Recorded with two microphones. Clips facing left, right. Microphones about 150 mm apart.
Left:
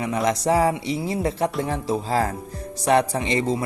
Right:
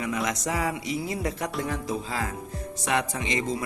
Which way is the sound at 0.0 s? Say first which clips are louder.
Left 6 dB; 30° left (ahead or behind).